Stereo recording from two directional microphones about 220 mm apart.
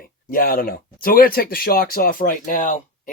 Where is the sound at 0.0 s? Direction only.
40° left (ahead or behind).